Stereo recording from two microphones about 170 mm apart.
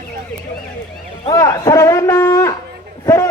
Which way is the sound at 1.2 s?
20° left (ahead or behind).